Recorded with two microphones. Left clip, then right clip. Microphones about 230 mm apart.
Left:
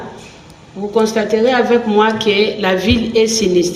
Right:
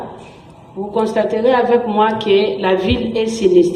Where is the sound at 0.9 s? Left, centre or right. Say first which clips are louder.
Left 2 dB; left.